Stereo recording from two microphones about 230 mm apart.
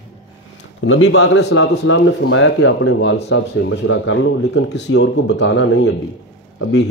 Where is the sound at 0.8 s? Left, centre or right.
Left.